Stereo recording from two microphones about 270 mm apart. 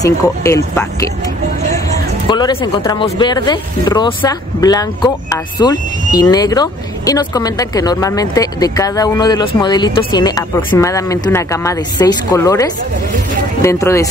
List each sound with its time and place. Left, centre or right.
0.0 s speech: centre
2.2 s speech: centre